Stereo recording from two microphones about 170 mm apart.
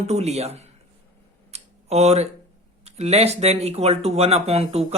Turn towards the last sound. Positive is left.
turn(degrees=-35)  # may be behind; listen again after turning